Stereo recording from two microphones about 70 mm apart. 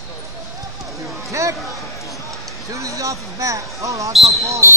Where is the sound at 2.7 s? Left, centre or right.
Right.